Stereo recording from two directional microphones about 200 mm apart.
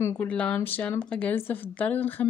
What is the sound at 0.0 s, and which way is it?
A woman's voice, 10° left (ahead or behind).